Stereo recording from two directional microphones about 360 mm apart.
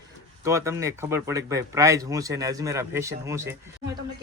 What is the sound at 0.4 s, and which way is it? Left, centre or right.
Speech, centre.